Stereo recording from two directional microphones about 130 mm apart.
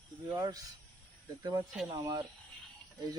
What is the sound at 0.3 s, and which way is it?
Speech, 30° right (ahead or behind).